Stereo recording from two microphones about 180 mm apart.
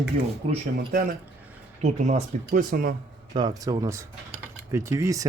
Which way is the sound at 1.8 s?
40° right (ahead or behind).